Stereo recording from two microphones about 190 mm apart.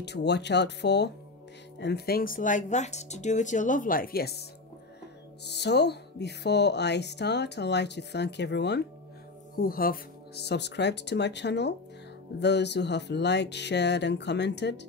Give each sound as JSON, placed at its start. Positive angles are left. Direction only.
{"t": 0.0, "sound": "speech", "side_deg": 65}
{"t": 9.6, "sound": "speech", "side_deg": 50}